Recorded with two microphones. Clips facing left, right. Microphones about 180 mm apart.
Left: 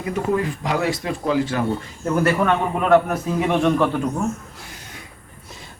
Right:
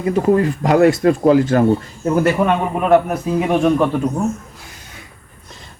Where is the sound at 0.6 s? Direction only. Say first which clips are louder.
Right 11 dB; 50° right (ahead or behind).